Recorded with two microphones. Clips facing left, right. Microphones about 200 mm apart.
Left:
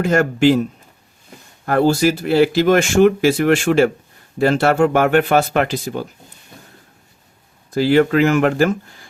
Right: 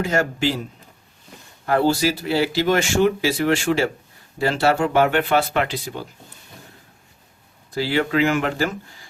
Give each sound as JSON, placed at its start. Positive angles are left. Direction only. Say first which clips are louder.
{"t": 0.0, "sound": "a man's voice", "louder": "left 7 dB", "side_deg": 55}
{"t": 1.6, "sound": "speech", "louder": "left 4 dB", "side_deg": 50}
{"t": 7.7, "sound": "speech", "louder": "left 7 dB", "side_deg": 50}